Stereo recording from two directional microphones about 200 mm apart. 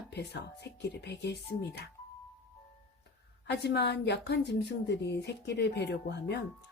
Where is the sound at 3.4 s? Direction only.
60° left (ahead or behind).